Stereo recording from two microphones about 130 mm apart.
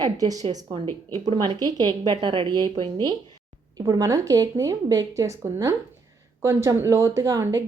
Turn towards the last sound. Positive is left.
turn(degrees=-25)  # may be behind; listen again after turning